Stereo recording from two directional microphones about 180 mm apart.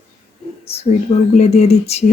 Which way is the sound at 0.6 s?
35° left (ahead or behind).